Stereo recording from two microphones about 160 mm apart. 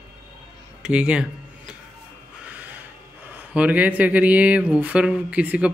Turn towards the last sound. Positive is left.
turn(degrees=-10)  # may be behind; listen again after turning